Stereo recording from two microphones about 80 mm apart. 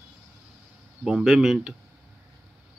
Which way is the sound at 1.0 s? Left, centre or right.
Centre.